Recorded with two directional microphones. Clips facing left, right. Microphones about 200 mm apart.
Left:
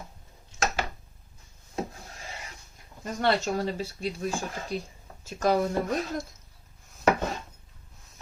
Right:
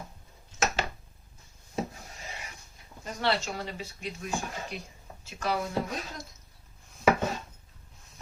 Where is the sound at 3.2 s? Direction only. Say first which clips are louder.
Left 4 dB; 45° left (ahead or behind).